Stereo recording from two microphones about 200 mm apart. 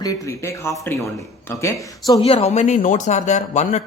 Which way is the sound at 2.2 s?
30° left (ahead or behind).